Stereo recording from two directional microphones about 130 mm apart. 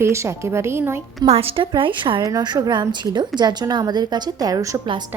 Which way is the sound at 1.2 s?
50° right (ahead or behind).